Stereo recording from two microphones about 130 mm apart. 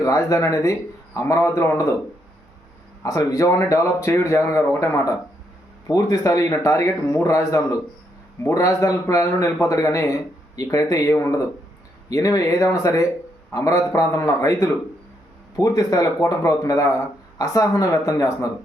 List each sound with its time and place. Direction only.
0.0 s a man's voice: 25° left (ahead or behind)
3.0 s a man's voice: 25° left (ahead or behind)